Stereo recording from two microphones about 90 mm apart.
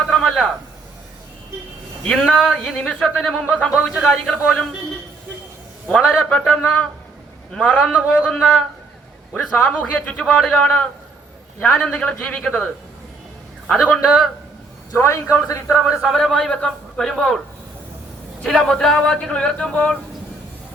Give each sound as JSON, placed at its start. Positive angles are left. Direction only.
{"t": 0.1, "sound": "a sound", "side_deg": 5}
{"t": 2.0, "sound": "speech", "side_deg": 5}
{"t": 6.2, "sound": "speech", "side_deg": 10}
{"t": 14.0, "sound": "a man's voice", "side_deg": -5}
{"t": 14.9, "sound": "a man's voice", "side_deg": 30}
{"t": 15.7, "sound": "speech", "side_deg": 0}
{"t": 16.3, "sound": "speech", "side_deg": 10}
{"t": 18.4, "sound": "speech", "side_deg": 5}